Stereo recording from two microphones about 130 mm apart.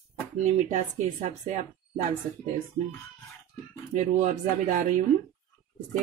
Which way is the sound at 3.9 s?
75° right (ahead or behind).